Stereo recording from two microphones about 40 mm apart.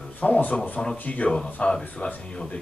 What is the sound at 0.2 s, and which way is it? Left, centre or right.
Speech, left.